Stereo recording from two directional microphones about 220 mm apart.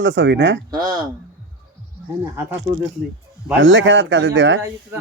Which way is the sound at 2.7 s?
60° right (ahead or behind).